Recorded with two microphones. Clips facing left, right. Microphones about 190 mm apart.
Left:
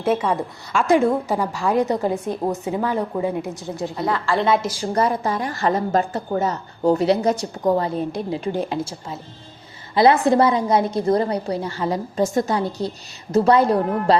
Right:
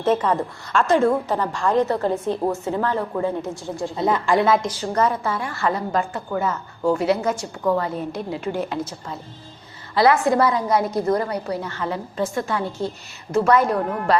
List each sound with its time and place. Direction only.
0.0 s a woman's voice: 10° left (ahead or behind)
3.9 s a woman's voice: 20° right (ahead or behind)
4.4 s a woman's voice: 5° left (ahead or behind)
5.2 s a woman's voice: 40° left (ahead or behind)
8.3 s a woman's voice: 25° left (ahead or behind)
9.9 s a woman's voice: 25° left (ahead or behind)